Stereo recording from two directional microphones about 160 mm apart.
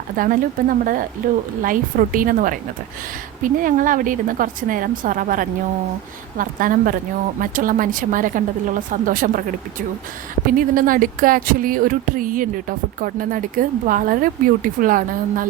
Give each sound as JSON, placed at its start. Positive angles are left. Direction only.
{"t": 0.2, "sound": "speech", "side_deg": -60}
{"t": 10.4, "sound": "speech", "side_deg": -60}